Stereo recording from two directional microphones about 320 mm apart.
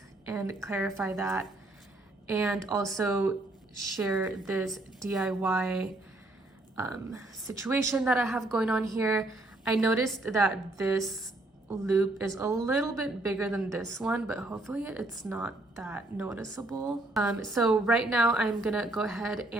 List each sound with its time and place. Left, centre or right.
0.3 s a woman's voice: centre